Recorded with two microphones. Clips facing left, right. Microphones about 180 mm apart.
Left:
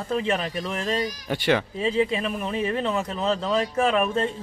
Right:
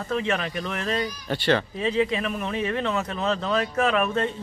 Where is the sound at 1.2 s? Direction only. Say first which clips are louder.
Even; 15° left (ahead or behind).